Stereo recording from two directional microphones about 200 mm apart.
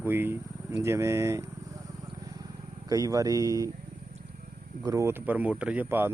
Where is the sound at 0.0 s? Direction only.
10° right (ahead or behind).